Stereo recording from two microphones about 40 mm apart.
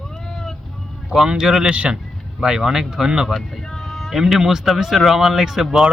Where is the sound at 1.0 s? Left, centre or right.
Centre.